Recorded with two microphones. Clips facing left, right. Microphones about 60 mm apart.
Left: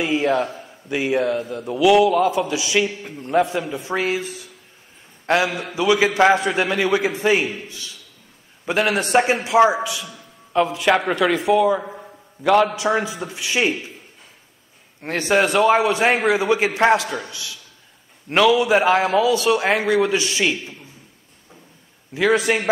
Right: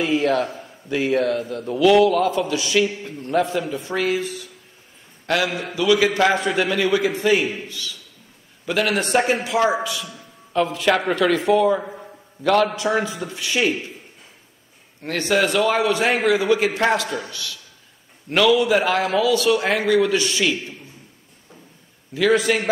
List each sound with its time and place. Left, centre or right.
0.0 s a man's voice: centre; by 4.1 s left
5.2 s a man's voice: left
8.9 s a man's voice: centre
15.0 s a man's voice: left
22.1 s a man's voice: centre